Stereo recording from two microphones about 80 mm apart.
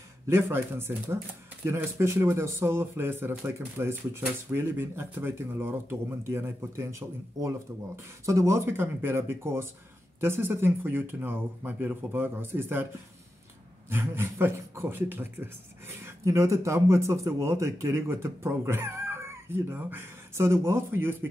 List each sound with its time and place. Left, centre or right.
0.3 s speech: right
13.8 s speech: right
16.3 s speech: right